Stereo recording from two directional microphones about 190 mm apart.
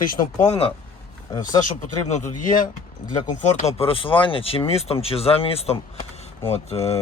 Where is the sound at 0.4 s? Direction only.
30° left (ahead or behind).